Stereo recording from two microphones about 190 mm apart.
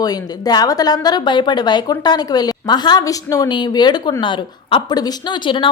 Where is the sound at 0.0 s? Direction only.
20° left (ahead or behind).